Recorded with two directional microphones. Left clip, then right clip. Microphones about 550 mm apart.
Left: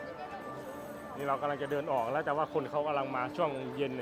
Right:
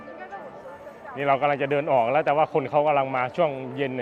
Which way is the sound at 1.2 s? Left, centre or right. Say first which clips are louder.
Right 11 dB; right.